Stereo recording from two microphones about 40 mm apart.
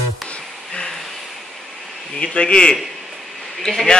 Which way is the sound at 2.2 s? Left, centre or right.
Left.